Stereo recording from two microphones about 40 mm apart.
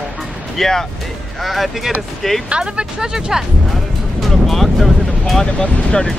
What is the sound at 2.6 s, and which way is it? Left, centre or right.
Speech, centre.